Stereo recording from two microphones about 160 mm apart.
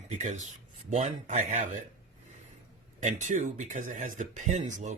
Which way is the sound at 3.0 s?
50° right (ahead or behind).